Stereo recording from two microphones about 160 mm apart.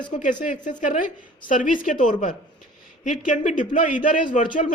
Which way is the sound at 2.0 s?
55° left (ahead or behind).